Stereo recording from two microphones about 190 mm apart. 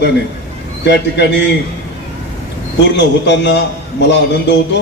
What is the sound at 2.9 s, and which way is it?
A man's voice, 65° left (ahead or behind).